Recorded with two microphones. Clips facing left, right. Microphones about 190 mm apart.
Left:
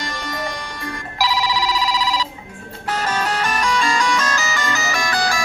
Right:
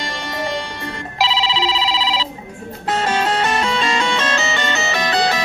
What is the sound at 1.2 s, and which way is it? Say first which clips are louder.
Telephone bell ringing: right 1 dB; 25° right (ahead or behind).